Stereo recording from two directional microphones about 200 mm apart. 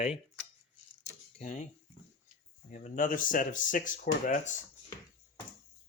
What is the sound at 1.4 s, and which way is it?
Speech, 35° left (ahead or behind).